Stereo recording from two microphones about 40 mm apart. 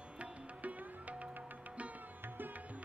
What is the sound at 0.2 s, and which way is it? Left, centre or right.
Music, right.